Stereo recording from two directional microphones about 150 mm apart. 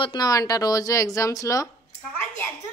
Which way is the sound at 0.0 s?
30° left (ahead or behind).